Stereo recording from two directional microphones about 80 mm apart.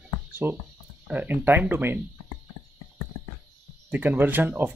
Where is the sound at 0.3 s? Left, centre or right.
Right.